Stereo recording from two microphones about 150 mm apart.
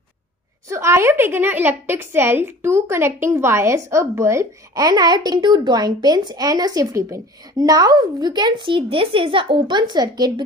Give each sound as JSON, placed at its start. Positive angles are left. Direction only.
{"t": 0.7, "sound": "a woman's voice", "side_deg": -20}